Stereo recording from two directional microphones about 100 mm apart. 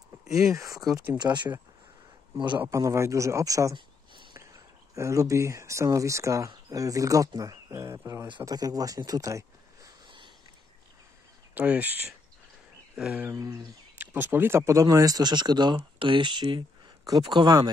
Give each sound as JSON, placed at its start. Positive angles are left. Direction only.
{"t": 0.5, "sound": "speech", "side_deg": -30}
{"t": 1.1, "sound": "speech", "side_deg": -50}
{"t": 2.7, "sound": "speech", "side_deg": -30}
{"t": 3.7, "sound": "a sound", "side_deg": -55}
{"t": 4.9, "sound": "speech", "side_deg": -30}
{"t": 8.5, "sound": "speech", "side_deg": -40}
{"t": 10.0, "sound": "a sound", "side_deg": -55}
{"t": 11.5, "sound": "speech", "side_deg": -15}
{"t": 13.3, "sound": "speech", "side_deg": -30}
{"t": 13.9, "sound": "speech", "side_deg": -20}